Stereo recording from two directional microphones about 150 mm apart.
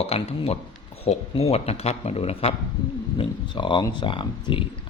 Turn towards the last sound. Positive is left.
turn(degrees=35)  # may be behind; listen again after turning